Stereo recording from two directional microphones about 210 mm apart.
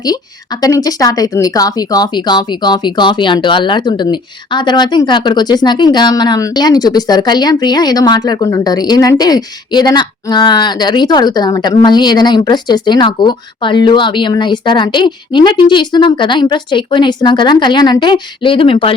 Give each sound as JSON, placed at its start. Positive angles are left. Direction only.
{"t": 0.6, "sound": "speech", "side_deg": 15}